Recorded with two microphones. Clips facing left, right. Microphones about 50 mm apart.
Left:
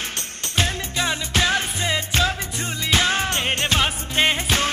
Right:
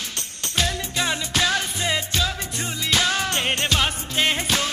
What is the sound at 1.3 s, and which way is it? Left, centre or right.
Music, left.